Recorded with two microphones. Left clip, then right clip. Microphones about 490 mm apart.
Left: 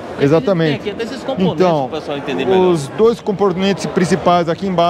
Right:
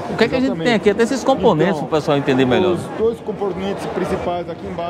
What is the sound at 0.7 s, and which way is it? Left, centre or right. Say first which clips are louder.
Speech: right 6 dB; right.